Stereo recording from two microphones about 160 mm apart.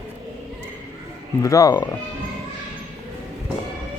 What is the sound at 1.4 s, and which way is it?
Speech, 20° left (ahead or behind).